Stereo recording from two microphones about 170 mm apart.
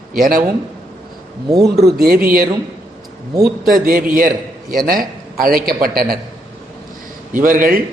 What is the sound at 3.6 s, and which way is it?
A man's voice, 60° right (ahead or behind).